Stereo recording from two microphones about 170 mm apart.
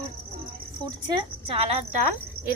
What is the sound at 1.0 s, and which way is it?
A woman's voice, 30° right (ahead or behind).